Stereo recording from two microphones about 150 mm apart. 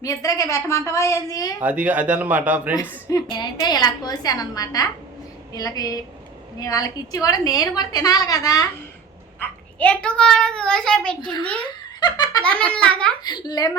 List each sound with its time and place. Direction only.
0.0 s a woman's voice: 20° left (ahead or behind)
1.6 s a man's voice: 10° right (ahead or behind)
3.1 s a woman's voice: 25° left (ahead or behind)
9.4 s a child's voice: 10° left (ahead or behind)
11.2 s a woman's voice: 30° left (ahead or behind)
11.6 s giggle: 30° left (ahead or behind)
12.4 s a child's voice: 10° left (ahead or behind)
13.2 s a woman's voice: 25° left (ahead or behind)